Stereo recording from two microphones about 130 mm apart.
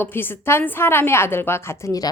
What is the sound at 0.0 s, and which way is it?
A woman's voice, 15° left (ahead or behind).